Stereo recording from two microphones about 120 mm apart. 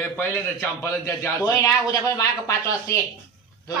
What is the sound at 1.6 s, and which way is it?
A man's voice, 25° left (ahead or behind).